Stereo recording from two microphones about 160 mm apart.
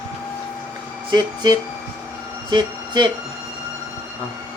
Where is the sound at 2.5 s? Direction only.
30° right (ahead or behind).